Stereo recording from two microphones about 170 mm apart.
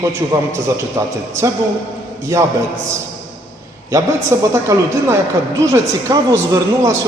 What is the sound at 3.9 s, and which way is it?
A woman's voice, 20° right (ahead or behind).